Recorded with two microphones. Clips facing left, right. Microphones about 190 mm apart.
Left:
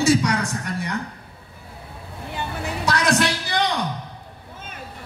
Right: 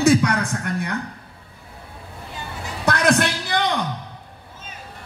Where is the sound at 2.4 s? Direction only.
60° left (ahead or behind).